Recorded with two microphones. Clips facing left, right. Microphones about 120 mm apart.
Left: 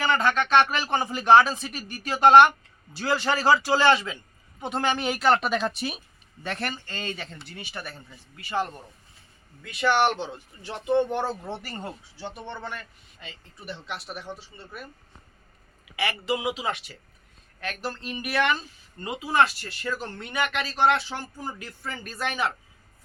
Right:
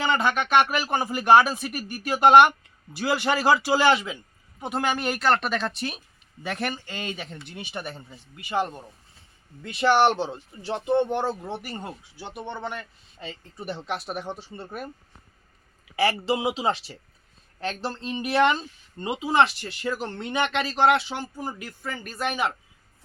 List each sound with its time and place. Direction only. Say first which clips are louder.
0.0 s speech: even; 15° right (ahead or behind); by 6.0 s 5° left (ahead or behind)
6.4 s speech: right 2 dB; 10° right (ahead or behind)
9.6 s a woman's voice: right 3 dB; 30° right (ahead or behind)
13.1 s speech: right 8 dB; 35° right (ahead or behind)
16.0 s a woman's voice: right 4 dB; 30° right (ahead or behind); by 22.4 s 10° right (ahead or behind)